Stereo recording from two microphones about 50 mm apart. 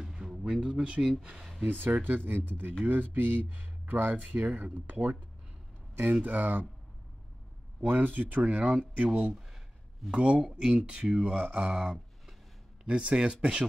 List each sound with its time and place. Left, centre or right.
0.0 s a sound: centre
0.5 s speech: right
1.3 s speech: centre
1.7 s speech: right
6.2 s speech: right
7.8 s speech: right; by 13.7 s centre